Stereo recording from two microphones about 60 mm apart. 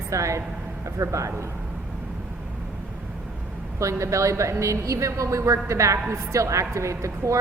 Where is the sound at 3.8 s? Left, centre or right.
Right.